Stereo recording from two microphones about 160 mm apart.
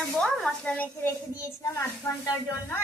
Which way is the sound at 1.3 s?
20° left (ahead or behind).